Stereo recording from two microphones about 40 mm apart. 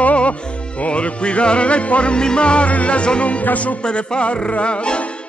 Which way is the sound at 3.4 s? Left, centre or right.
Left.